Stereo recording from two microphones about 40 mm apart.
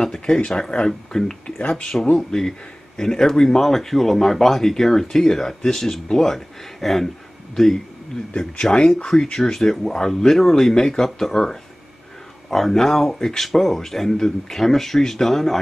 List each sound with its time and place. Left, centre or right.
0.0 s speech: centre
1.1 s speech: centre
1.7 s speech: left; by 15.6 s centre